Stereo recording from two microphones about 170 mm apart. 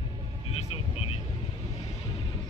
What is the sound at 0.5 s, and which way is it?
Vehicle, 35° left (ahead or behind).